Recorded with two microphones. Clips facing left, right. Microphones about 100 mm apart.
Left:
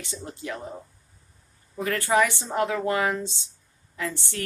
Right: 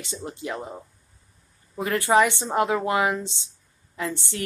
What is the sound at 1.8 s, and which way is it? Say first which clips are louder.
Speech: right 3 dB; 20° right (ahead or behind).